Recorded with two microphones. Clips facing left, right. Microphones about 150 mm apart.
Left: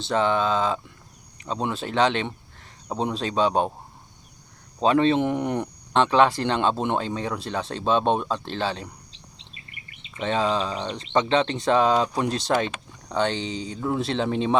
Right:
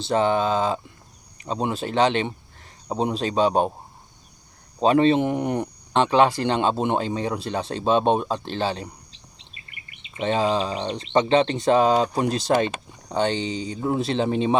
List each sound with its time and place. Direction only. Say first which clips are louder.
0.0 s speech: right 2 dB; 5° right (ahead or behind)
4.8 s speech: right 2 dB; 5° right (ahead or behind)
10.2 s speech: right 2 dB; 5° right (ahead or behind)
10.8 s speech: right 3 dB; 25° right (ahead or behind)
11.1 s speech: right 3 dB; 5° right (ahead or behind)
11.7 s speech: right 2 dB; 40° right (ahead or behind)
12.2 s speech: right 3 dB; centre (ahead or behind)